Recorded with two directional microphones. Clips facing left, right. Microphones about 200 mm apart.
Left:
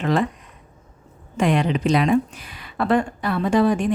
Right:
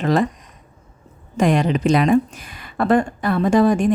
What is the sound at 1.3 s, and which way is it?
Speech, 40° right (ahead or behind).